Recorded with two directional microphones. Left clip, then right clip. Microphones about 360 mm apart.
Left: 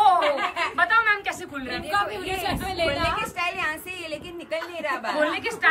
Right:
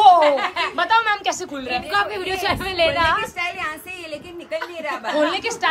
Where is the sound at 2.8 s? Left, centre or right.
Centre.